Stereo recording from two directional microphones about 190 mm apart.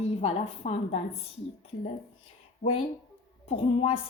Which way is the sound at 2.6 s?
30° left (ahead or behind).